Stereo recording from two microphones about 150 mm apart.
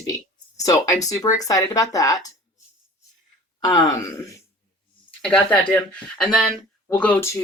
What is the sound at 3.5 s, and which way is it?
Speech, 25° left (ahead or behind).